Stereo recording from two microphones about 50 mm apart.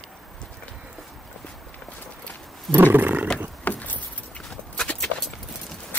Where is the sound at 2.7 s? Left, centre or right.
Right.